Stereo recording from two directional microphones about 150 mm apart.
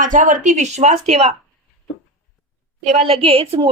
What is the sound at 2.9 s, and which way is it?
Speech, 40° right (ahead or behind).